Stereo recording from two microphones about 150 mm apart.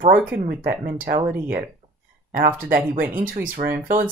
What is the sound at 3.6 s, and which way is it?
Speech, 65° right (ahead or behind).